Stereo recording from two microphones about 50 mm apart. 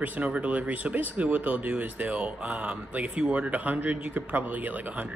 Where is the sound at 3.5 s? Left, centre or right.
Right.